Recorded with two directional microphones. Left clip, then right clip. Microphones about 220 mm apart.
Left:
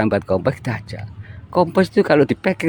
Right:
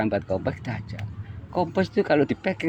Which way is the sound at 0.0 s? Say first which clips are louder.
Left 7 dB; 45° left (ahead or behind).